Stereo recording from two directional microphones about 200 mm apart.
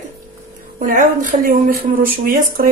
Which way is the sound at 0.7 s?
40° right (ahead or behind).